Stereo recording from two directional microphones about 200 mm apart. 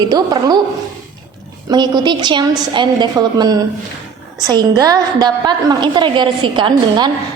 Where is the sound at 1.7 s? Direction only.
20° right (ahead or behind).